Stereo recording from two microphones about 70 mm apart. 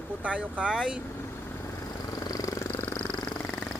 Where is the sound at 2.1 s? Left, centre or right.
Left.